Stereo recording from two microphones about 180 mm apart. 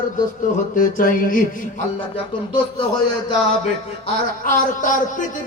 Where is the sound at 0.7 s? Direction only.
50° left (ahead or behind).